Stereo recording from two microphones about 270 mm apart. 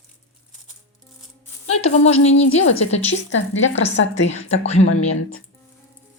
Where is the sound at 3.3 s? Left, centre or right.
Left.